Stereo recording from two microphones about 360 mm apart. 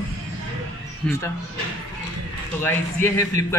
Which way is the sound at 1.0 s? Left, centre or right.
Centre.